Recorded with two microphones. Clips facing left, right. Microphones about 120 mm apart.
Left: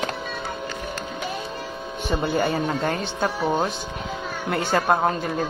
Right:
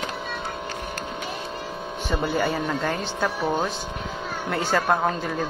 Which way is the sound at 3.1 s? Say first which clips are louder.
Left 2 dB; 20° left (ahead or behind).